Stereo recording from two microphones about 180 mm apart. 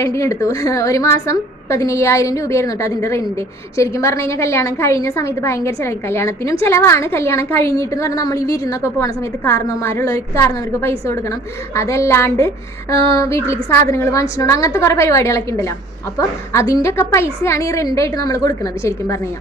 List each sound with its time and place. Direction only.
0.0 s a woman's voice: 15° left (ahead or behind)